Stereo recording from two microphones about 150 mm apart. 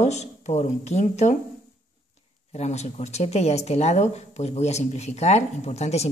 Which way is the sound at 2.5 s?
45° left (ahead or behind).